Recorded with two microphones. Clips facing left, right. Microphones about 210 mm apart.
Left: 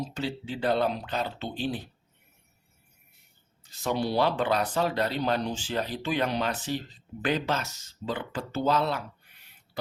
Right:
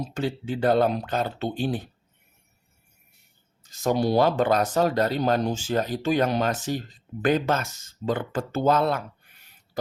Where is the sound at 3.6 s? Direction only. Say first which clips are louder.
Right 6 dB; 45° right (ahead or behind).